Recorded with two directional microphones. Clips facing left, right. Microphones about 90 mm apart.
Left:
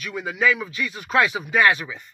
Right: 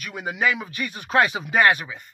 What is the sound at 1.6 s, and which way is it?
Speech, 50° right (ahead or behind).